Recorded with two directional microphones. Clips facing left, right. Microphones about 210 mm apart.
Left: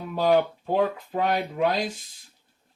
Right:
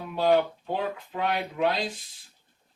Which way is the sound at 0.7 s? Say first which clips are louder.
Left 6 dB; 45° left (ahead or behind).